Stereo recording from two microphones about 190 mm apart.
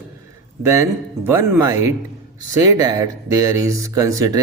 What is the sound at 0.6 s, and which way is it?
Speech, 15° right (ahead or behind).